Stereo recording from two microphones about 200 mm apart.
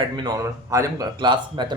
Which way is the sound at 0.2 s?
15° right (ahead or behind).